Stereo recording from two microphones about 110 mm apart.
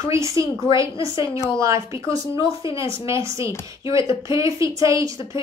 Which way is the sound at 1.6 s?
25° right (ahead or behind).